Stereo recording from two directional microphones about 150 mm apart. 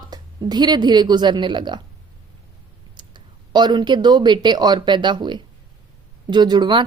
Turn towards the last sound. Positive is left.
turn(degrees=-30)  # may be behind; listen again after turning